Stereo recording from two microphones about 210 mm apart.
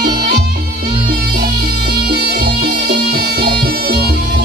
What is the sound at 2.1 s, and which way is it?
Music, 50° right (ahead or behind).